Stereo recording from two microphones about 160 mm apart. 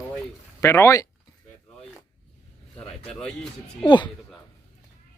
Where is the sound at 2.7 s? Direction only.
5° left (ahead or behind).